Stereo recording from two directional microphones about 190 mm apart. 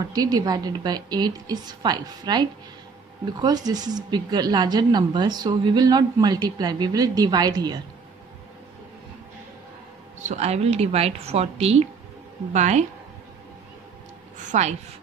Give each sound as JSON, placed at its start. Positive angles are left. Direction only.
{"t": 0.0, "sound": "speech", "side_deg": -20}
{"t": 10.2, "sound": "a woman's voice", "side_deg": -35}
{"t": 14.4, "sound": "a woman's voice", "side_deg": -40}